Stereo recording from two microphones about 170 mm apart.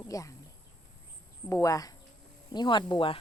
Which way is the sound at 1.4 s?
20° left (ahead or behind).